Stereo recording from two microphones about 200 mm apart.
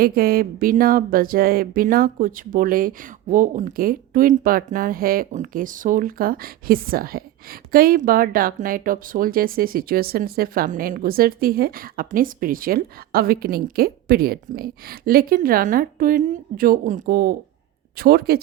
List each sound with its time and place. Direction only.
0.0 s speech: 50° right (ahead or behind)